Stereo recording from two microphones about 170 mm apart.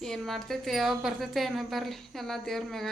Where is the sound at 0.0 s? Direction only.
5° left (ahead or behind).